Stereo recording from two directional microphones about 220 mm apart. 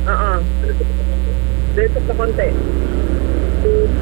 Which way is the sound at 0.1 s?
15° right (ahead or behind).